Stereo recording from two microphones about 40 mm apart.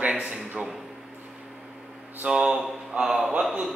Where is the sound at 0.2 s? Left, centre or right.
Centre.